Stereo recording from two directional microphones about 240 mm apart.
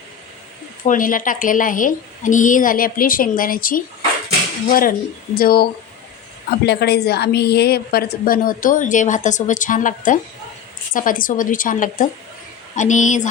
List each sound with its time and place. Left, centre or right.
0.9 s a woman's voice: left
6.7 s a woman's voice: left